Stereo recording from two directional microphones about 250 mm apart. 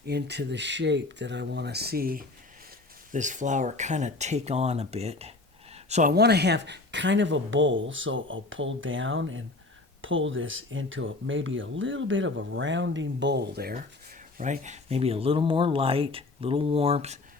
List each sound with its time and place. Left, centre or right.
0.0 s speech: right
14.3 s speech: right